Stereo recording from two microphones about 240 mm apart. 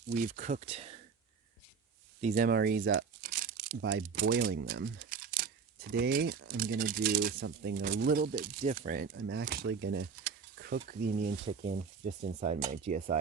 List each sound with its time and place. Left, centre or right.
0.1 s speech: right
2.2 s speech: right